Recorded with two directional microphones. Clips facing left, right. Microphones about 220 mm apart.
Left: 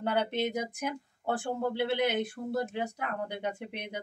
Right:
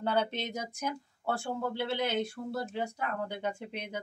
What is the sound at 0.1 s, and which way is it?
Speech, 15° left (ahead or behind).